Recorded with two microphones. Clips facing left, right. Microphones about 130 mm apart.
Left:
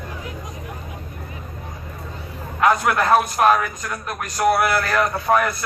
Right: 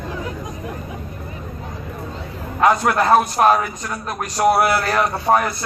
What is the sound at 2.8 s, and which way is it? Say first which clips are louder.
A man's voice: right 2 dB; 30° right (ahead or behind).